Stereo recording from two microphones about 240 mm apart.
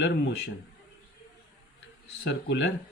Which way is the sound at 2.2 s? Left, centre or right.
Left.